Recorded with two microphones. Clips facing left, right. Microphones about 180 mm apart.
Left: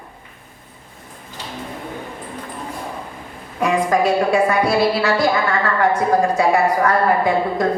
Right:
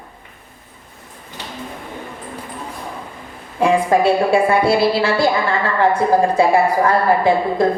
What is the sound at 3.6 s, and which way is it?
A woman's voice, 30° right (ahead or behind).